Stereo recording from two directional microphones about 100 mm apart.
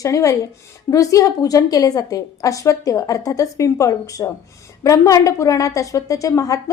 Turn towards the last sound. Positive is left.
turn(degrees=35)  # may be behind; listen again after turning